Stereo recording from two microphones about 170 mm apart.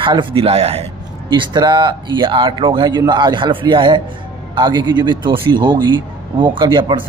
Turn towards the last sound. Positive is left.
turn(degrees=-25)  # may be behind; listen again after turning